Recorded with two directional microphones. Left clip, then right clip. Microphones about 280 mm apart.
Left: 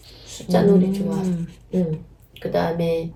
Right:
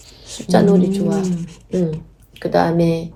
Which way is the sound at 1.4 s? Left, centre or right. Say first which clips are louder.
Right 4 dB; right.